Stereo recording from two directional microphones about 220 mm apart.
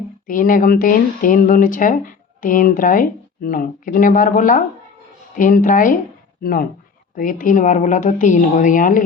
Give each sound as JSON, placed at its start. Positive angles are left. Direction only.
{"t": 0.3, "sound": "speech", "side_deg": 40}